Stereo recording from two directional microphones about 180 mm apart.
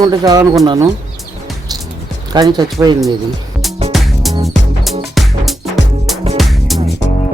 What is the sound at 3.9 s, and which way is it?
Music, centre (ahead or behind).